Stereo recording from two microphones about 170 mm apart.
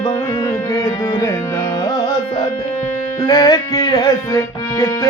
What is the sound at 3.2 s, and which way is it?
Music, 20° left (ahead or behind).